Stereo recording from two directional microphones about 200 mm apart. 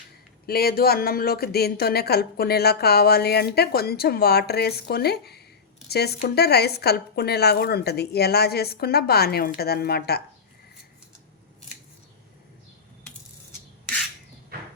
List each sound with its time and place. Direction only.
0.4 s speech: 50° left (ahead or behind)